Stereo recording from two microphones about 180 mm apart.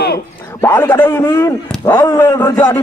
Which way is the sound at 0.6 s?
10° left (ahead or behind).